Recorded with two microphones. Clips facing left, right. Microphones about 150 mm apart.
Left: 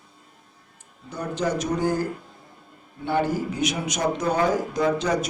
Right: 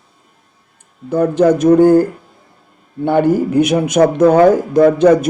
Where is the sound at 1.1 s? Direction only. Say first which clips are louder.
Right 15 dB; 55° right (ahead or behind).